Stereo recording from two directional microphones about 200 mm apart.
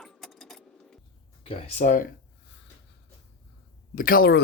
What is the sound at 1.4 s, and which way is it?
Speech, 30° left (ahead or behind).